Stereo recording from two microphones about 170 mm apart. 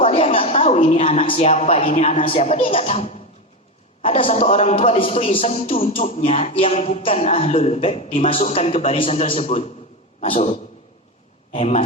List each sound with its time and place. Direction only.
0.0 s a woman's voice: 35° left (ahead or behind)